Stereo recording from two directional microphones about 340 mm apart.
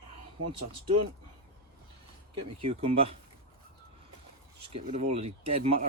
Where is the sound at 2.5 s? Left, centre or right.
Right.